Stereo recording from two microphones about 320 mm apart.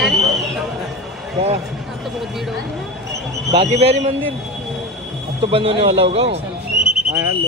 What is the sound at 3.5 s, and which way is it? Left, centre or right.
Speech, centre.